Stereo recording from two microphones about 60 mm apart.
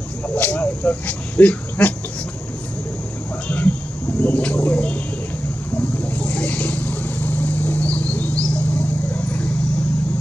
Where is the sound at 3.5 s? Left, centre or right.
Left.